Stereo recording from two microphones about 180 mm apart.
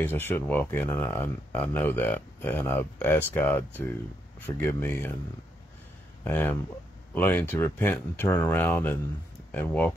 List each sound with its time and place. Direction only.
0.0 s speech: 10° left (ahead or behind)
6.2 s speech: 10° left (ahead or behind)